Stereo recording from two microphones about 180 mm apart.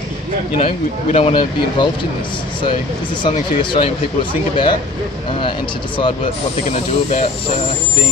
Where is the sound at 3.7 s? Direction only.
30° left (ahead or behind).